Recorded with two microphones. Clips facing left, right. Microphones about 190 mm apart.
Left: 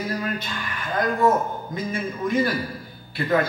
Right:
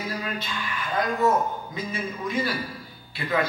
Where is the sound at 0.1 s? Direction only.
50° left (ahead or behind).